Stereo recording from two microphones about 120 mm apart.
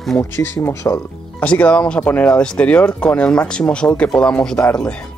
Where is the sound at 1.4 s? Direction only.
10° left (ahead or behind).